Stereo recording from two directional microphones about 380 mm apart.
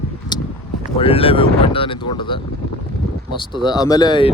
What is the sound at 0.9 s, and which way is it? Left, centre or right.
Speech, centre.